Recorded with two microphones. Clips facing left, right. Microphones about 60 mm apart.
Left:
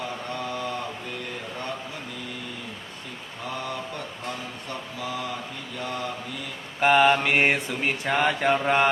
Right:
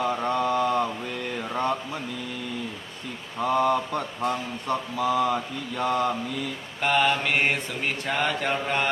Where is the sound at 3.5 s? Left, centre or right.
Right.